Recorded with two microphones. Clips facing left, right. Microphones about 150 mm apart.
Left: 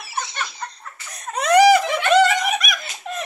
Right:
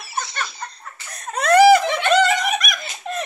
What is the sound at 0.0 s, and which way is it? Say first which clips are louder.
Laughter: right 1 dB; 20° left (ahead or behind).